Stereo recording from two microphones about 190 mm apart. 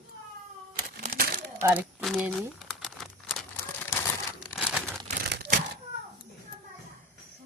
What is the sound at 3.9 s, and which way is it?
Crumpling, 15° left (ahead or behind).